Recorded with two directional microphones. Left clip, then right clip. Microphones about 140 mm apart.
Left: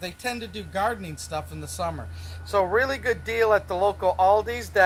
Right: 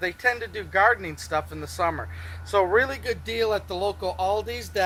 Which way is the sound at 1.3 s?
20° left (ahead or behind).